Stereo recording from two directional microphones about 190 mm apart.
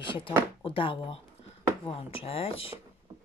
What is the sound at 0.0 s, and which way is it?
Speech, 25° left (ahead or behind).